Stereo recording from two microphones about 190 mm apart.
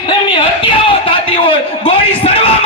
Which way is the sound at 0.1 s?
25° left (ahead or behind).